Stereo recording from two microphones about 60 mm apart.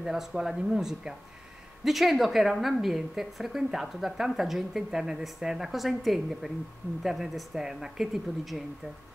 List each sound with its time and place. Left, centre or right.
0.0 s a woman's voice: centre